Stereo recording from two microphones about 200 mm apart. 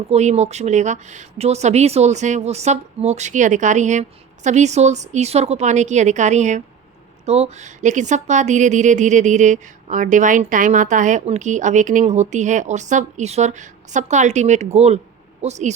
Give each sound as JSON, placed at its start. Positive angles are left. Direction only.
{"t": 0.1, "sound": "speech", "side_deg": -35}